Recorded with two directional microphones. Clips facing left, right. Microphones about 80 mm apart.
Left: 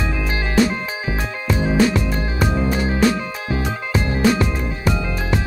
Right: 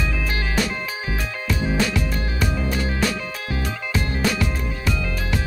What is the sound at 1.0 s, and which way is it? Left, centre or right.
Music, left.